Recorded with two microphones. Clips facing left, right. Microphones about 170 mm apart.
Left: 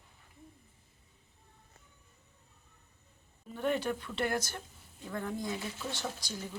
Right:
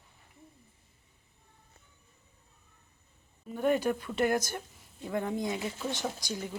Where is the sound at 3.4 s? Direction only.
10° right (ahead or behind).